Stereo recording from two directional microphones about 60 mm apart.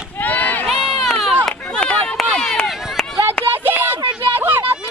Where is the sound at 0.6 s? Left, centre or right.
Centre.